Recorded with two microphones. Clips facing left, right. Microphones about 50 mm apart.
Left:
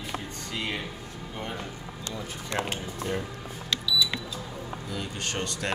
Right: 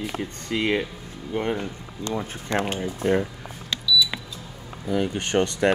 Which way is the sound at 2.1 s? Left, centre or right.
Right.